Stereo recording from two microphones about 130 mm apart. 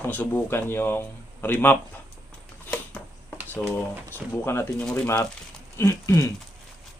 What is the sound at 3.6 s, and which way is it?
Speech, 10° left (ahead or behind).